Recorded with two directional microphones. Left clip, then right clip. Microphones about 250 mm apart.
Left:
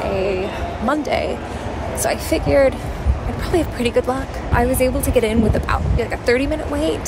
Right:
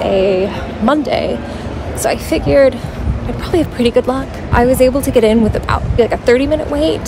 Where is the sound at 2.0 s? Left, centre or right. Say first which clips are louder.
Right 5 dB; centre.